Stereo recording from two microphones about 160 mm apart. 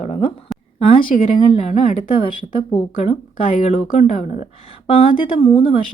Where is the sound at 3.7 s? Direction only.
45° left (ahead or behind).